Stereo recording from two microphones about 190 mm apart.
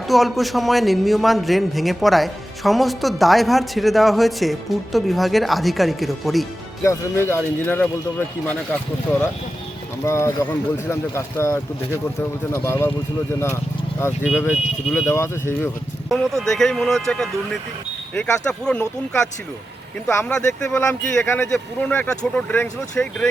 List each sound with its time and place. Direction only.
0.1 s a man's voice: centre (ahead or behind)
6.8 s speech: 15° left (ahead or behind)
9.0 s speech: 10° left (ahead or behind)
14.3 s a man's voice: 5° right (ahead or behind)
15.1 s speech: 15° left (ahead or behind)
16.0 s a man's voice: centre (ahead or behind)